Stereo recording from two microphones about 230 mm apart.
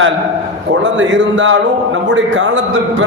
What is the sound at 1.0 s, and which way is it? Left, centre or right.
Speech, right.